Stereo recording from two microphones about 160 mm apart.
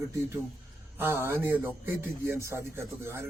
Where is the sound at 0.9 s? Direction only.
15° right (ahead or behind).